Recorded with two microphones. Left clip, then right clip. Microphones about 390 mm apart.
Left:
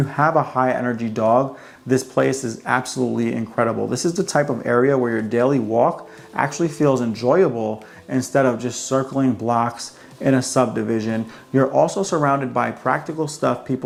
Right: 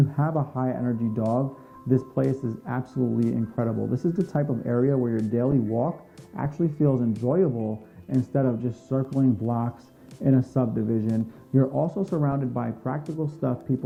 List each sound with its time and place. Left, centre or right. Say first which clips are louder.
0.0 s speech: left 10 dB; centre
7.5 s speech: left 7 dB; left
8.1 s speech: left 8 dB; centre